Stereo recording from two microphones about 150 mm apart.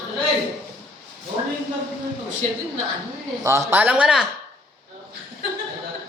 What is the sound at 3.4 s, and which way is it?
Speech, 20° right (ahead or behind).